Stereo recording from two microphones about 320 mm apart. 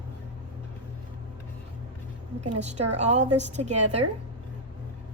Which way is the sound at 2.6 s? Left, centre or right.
Right.